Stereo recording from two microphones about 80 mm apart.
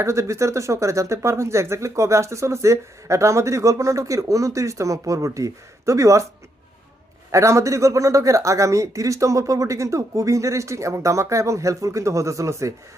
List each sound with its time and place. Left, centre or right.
0.0 s speech: right
7.3 s speech: right